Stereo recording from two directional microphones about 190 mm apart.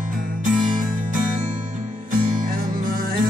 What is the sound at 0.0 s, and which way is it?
Music, 45° right (ahead or behind).